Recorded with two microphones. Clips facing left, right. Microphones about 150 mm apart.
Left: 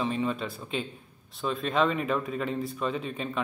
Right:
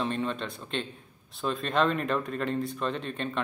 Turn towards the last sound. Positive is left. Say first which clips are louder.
# left 1 dB
turn(degrees=5)  # may be behind; listen again after turning